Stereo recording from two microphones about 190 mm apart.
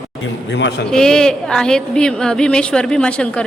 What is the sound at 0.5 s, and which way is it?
Speech, 70° left (ahead or behind).